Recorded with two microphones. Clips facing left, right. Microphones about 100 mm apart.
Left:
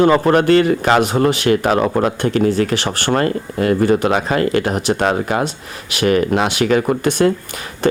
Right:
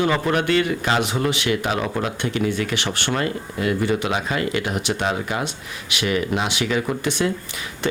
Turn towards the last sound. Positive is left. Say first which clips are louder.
# left 8 dB
turn(degrees=45)  # may be behind; listen again after turning